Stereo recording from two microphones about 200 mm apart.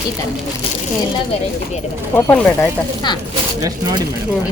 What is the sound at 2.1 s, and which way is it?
Speech, 10° left (ahead or behind).